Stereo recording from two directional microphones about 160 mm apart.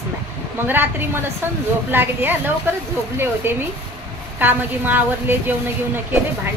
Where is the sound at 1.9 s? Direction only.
15° right (ahead or behind).